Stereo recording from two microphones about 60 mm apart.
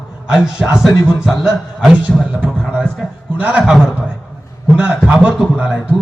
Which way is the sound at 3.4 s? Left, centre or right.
Centre.